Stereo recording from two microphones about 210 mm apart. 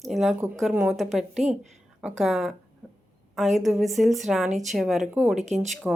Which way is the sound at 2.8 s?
Centre (ahead or behind).